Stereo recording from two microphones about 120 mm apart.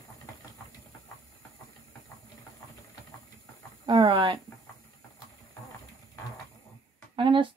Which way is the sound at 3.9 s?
45° right (ahead or behind).